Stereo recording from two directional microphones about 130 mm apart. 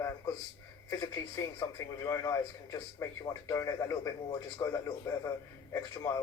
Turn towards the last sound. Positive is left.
turn(degrees=25)  # may be behind; listen again after turning